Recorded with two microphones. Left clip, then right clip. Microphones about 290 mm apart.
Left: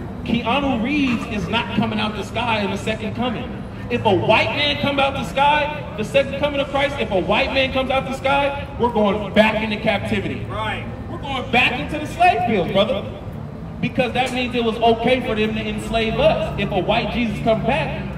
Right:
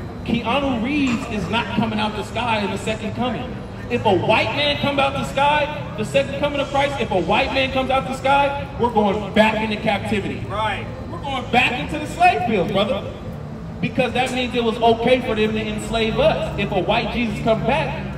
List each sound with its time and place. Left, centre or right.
0.3 s a man's voice: centre